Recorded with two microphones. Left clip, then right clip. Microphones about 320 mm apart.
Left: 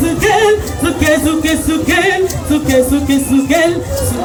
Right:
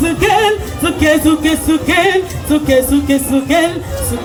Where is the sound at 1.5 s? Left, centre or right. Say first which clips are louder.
Even; centre.